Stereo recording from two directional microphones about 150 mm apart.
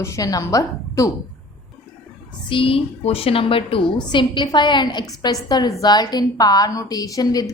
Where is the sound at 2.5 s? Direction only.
35° left (ahead or behind).